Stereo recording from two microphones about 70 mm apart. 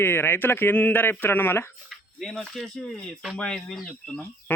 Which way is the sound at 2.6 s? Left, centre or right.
Centre.